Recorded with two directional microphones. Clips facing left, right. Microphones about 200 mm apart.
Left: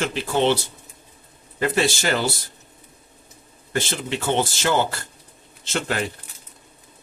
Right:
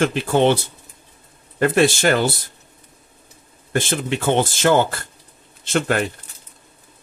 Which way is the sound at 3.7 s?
50° right (ahead or behind).